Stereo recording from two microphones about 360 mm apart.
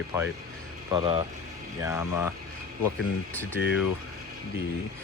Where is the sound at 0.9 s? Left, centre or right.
Centre.